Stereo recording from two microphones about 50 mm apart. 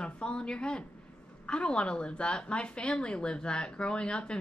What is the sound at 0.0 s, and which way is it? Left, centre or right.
A woman's voice, centre.